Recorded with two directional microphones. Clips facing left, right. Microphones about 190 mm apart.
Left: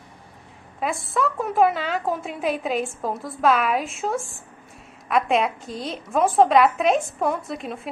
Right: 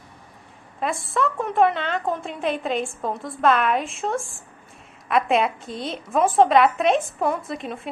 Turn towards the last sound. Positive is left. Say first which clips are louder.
# even
turn(degrees=0)  # may be behind; listen again after turning